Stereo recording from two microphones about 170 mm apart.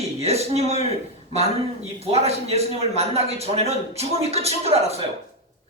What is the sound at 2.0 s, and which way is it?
A man's voice, 40° right (ahead or behind).